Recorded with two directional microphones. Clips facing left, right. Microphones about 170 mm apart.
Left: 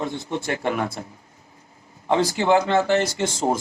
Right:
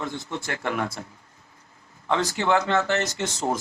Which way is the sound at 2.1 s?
30° left (ahead or behind).